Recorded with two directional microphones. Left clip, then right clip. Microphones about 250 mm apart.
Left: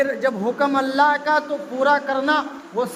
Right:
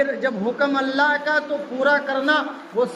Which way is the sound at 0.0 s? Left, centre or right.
Left.